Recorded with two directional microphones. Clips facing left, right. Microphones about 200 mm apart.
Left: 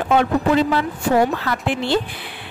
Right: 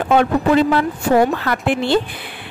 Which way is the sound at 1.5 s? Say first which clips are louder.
Right 3 dB; 55° right (ahead or behind).